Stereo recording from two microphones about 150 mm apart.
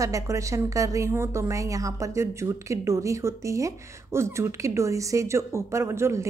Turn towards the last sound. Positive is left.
turn(degrees=-20)  # may be behind; listen again after turning